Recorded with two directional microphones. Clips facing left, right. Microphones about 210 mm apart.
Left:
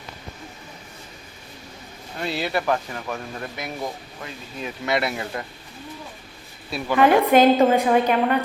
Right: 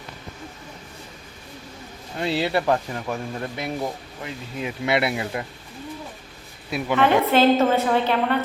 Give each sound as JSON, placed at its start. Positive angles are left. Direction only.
{"t": 2.1, "sound": "speech", "side_deg": -25}
{"t": 6.7, "sound": "a woman's voice", "side_deg": -15}
{"t": 6.9, "sound": "a woman's voice", "side_deg": 10}